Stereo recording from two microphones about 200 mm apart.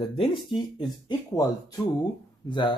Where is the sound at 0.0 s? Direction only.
25° left (ahead or behind).